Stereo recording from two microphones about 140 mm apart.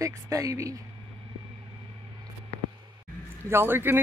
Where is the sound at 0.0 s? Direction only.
25° right (ahead or behind).